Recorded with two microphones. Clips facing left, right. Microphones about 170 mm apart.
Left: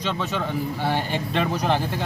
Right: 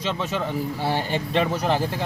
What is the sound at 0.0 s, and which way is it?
Speech, 5° right (ahead or behind).